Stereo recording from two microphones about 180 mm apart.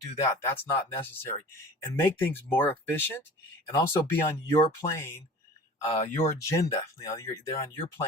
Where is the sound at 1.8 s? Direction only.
15° left (ahead or behind).